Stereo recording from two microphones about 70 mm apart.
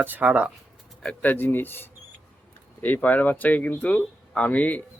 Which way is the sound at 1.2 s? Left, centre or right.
Left.